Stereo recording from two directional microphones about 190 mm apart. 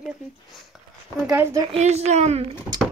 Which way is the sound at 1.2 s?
15° right (ahead or behind).